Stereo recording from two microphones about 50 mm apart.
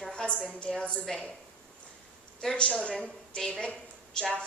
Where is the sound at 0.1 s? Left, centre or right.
Centre.